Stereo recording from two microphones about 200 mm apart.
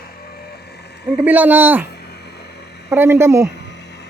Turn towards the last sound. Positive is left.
turn(degrees=-15)  # may be behind; listen again after turning